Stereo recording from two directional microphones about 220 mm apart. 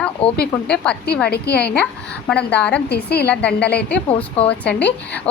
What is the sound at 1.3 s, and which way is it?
Speech, 45° left (ahead or behind).